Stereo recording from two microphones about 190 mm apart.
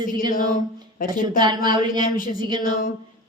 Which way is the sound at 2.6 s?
45° left (ahead or behind).